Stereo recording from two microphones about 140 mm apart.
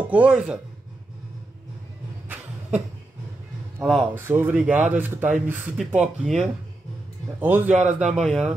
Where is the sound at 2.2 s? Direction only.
10° right (ahead or behind).